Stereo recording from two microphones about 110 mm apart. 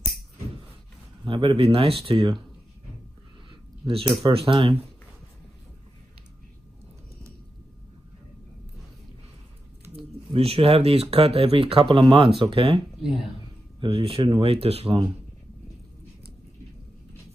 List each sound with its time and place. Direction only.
1.2 s speech: 55° right (ahead or behind)
3.8 s speech: 55° right (ahead or behind)
10.3 s speech: 60° right (ahead or behind)